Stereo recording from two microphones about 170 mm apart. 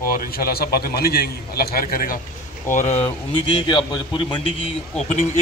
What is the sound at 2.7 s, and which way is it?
Speech, 45° left (ahead or behind).